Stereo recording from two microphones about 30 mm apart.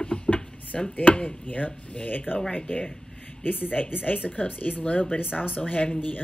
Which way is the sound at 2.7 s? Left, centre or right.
Left.